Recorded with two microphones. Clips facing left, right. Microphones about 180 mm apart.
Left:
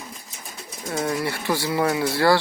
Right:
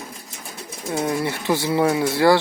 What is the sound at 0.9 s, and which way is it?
Speech, 20° right (ahead or behind).